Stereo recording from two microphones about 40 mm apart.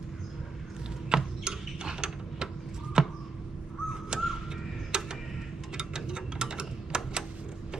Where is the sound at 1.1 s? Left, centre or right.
Centre.